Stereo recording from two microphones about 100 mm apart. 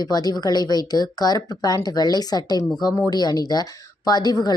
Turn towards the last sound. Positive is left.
turn(degrees=40)  # may be behind; listen again after turning